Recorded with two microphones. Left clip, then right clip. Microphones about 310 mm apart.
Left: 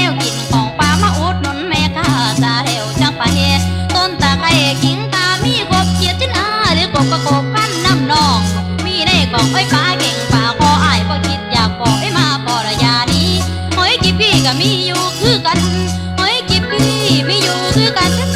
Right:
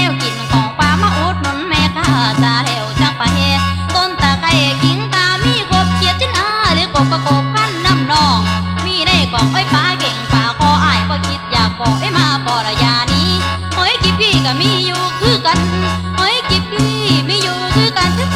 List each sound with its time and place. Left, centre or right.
0.5 s music: centre
12.1 s music: centre